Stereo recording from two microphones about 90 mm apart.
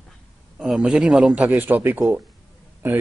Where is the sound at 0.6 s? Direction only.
5° right (ahead or behind).